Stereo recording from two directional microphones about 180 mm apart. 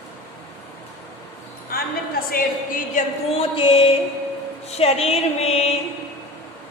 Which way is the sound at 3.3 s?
30° left (ahead or behind).